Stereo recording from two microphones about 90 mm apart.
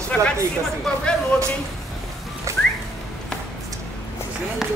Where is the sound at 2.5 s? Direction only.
35° right (ahead or behind).